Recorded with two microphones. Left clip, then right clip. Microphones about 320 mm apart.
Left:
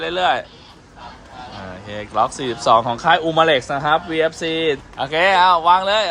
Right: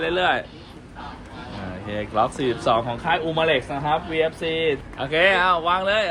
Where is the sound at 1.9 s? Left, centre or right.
Centre.